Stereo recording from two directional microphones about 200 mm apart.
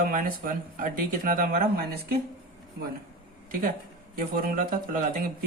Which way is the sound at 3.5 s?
45° right (ahead or behind).